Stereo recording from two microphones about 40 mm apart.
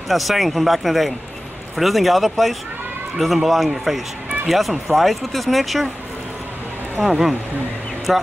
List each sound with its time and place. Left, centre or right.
0.1 s speech: centre
7.0 s speech: centre